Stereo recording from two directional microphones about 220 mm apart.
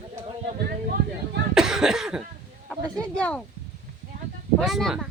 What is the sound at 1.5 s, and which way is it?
Cough, centre (ahead or behind).